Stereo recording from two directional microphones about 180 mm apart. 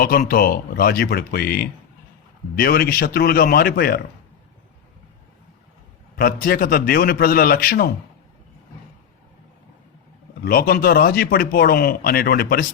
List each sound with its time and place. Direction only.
0.0 s speech: 55° left (ahead or behind)
6.1 s speech: 55° left (ahead or behind)
10.4 s speech: 60° left (ahead or behind)